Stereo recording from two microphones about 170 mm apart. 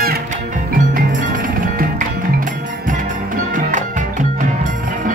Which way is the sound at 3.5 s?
50° right (ahead or behind).